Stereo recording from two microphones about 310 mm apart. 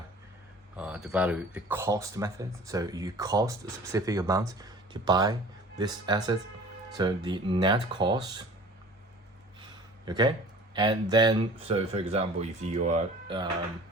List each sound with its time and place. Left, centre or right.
0.8 s speech: centre
10.1 s speech: centre